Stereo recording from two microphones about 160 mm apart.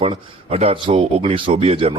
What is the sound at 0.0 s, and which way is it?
Speech, 35° right (ahead or behind).